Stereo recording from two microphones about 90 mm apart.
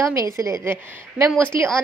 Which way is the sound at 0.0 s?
35° right (ahead or behind).